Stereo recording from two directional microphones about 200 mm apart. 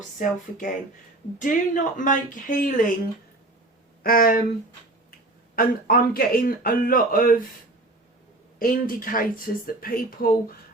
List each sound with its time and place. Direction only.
0.2 s speech: 40° left (ahead or behind)
4.0 s a man's voice: 45° left (ahead or behind)
5.5 s a man's voice: 45° left (ahead or behind)
8.5 s a man's voice: 45° left (ahead or behind)